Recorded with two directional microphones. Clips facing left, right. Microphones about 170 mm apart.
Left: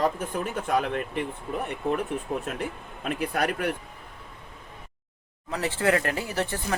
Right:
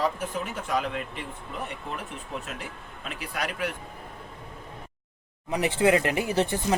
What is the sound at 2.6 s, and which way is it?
Speech, 55° left (ahead or behind).